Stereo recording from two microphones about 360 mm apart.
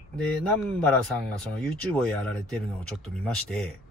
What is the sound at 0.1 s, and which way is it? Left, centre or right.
Speech, centre.